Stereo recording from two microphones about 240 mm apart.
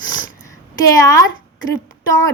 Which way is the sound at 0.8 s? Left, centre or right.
Centre.